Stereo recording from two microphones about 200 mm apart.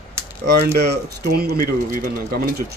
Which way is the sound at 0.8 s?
50° right (ahead or behind).